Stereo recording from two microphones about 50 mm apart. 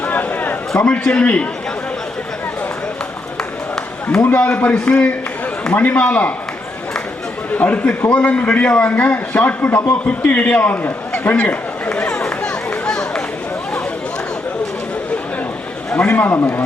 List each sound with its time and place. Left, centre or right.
0.0 s a sound: left
0.9 s a man's voice: left
4.4 s a man's voice: left
7.5 s a man's voice: left
11.9 s run: centre
16.0 s a man's voice: left